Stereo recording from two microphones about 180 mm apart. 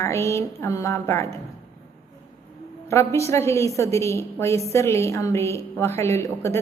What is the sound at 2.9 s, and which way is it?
A woman's voice, 15° left (ahead or behind).